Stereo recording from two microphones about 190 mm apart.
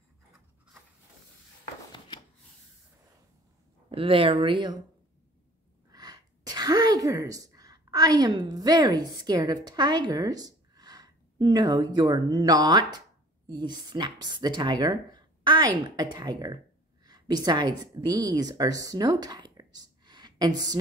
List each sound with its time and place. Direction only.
1.9 s a sound: 25° left (ahead or behind)
3.9 s speech: 30° right (ahead or behind)
5.9 s a woman's voice: 20° right (ahead or behind)